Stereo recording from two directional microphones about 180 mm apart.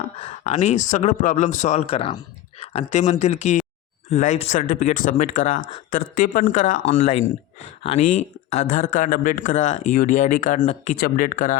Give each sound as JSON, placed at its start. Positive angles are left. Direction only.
{"t": 0.2, "sound": "speech", "side_deg": 35}
{"t": 8.4, "sound": "speech", "side_deg": 45}